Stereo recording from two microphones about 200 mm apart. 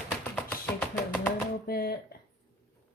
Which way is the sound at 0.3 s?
5° left (ahead or behind).